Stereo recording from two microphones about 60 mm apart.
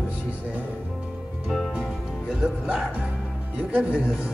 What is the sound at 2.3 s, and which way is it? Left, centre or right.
A man's voice, centre.